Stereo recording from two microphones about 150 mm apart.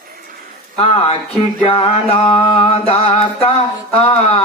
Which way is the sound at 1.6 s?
35° left (ahead or behind).